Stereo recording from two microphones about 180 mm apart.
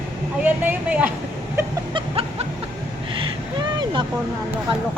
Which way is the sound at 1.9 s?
30° right (ahead or behind).